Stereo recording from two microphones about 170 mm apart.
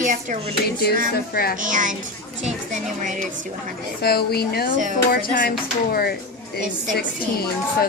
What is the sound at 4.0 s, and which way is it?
A woman's voice, 65° left (ahead or behind).